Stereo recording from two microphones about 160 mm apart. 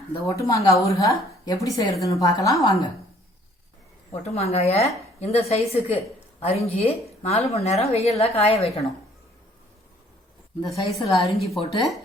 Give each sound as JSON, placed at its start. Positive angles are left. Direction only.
{"t": 0.3, "sound": "a woman's voice", "side_deg": 20}
{"t": 4.1, "sound": "a woman's voice", "side_deg": 40}
{"t": 10.7, "sound": "a woman's voice", "side_deg": 0}